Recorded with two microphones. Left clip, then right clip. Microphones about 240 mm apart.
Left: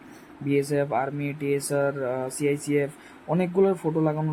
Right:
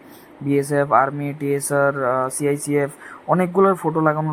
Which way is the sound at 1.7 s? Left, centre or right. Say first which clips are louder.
Right 11 dB; centre.